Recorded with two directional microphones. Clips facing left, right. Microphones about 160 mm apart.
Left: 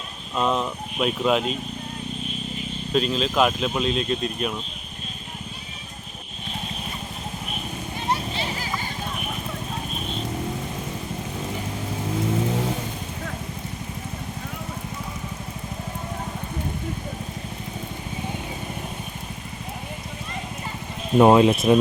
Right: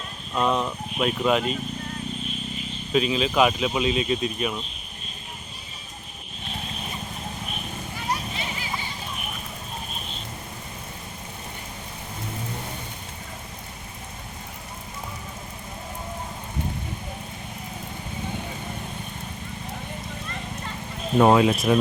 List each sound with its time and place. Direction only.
0.3 s speech: centre (ahead or behind)
2.9 s speech: centre (ahead or behind)
7.9 s a sound: 30° left (ahead or behind)
21.2 s speech: 20° left (ahead or behind)